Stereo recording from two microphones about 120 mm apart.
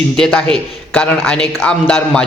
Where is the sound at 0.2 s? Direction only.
5° left (ahead or behind).